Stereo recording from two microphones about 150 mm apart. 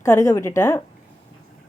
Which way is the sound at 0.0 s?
20° left (ahead or behind).